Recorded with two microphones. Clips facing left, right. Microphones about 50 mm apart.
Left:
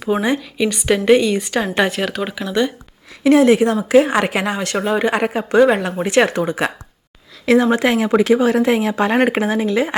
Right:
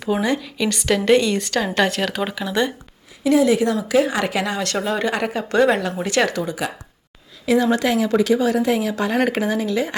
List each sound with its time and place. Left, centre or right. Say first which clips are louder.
0.2 s a woman's voice: left 3 dB; centre
3.2 s a woman's voice: left 4 dB; left